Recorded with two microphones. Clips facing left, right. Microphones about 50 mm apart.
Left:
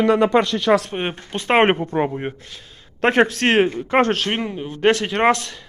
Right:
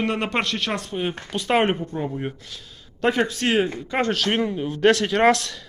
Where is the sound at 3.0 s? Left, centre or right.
Left.